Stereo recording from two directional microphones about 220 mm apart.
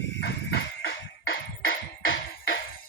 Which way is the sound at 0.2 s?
50° left (ahead or behind).